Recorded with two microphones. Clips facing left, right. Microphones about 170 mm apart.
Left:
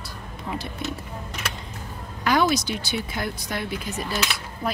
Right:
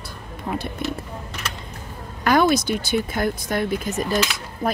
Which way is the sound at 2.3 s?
50° right (ahead or behind).